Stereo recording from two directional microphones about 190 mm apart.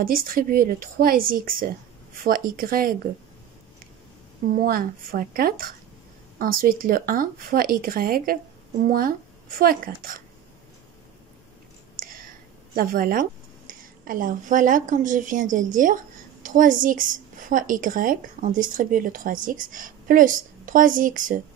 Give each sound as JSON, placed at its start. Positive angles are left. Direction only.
{"t": 0.0, "sound": "a woman's voice", "side_deg": -50}
{"t": 4.6, "sound": "a woman's voice", "side_deg": -50}
{"t": 12.7, "sound": "a woman's voice", "side_deg": -50}